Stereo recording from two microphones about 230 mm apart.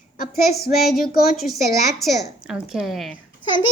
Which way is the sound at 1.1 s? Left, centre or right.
Left.